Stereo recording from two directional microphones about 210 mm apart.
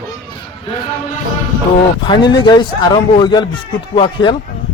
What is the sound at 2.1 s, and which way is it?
A man's voice, 20° left (ahead or behind).